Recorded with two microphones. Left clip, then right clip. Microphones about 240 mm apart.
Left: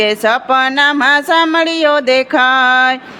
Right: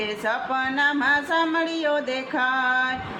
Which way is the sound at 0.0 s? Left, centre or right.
Left.